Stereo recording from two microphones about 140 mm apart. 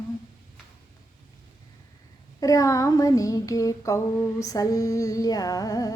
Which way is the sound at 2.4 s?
25° left (ahead or behind).